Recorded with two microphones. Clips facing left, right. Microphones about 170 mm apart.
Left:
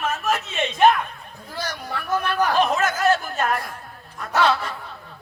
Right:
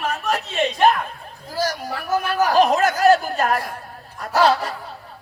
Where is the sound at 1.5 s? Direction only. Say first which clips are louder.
Right 6 dB; 35° right (ahead or behind).